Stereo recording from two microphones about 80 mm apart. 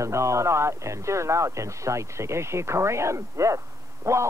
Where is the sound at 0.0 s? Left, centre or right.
Right.